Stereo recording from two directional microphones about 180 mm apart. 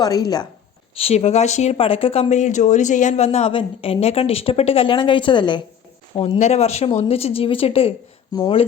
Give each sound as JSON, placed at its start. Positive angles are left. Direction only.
{"t": 0.0, "sound": "a woman's voice", "side_deg": 20}
{"t": 0.9, "sound": "a woman's voice", "side_deg": 35}